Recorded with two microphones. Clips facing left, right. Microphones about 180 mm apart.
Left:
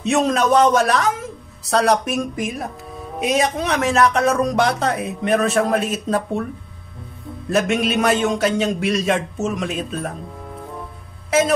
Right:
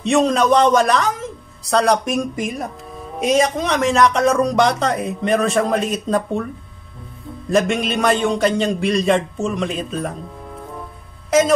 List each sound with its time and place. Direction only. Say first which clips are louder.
0.0 s a man's voice: right 2 dB; 5° left (ahead or behind)
7.5 s a man's voice: right 1 dB; 5° left (ahead or behind)